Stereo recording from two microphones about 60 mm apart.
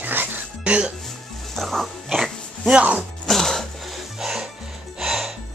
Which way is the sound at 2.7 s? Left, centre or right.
Right.